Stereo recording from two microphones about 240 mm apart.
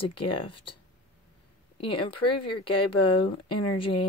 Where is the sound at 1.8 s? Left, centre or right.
Left.